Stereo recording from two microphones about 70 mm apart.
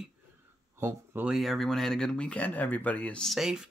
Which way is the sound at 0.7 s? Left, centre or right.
Right.